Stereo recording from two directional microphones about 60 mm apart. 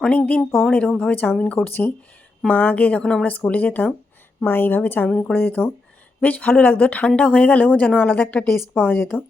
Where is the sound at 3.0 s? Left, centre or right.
Centre.